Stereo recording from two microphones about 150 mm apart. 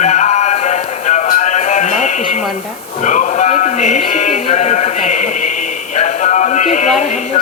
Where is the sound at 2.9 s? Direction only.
55° left (ahead or behind).